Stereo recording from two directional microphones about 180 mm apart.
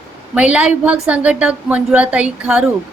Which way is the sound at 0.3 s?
5° right (ahead or behind).